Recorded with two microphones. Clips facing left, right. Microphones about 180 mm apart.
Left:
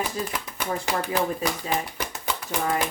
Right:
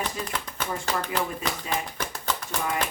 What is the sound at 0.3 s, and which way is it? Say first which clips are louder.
Speech: left 2 dB; 10° left (ahead or behind).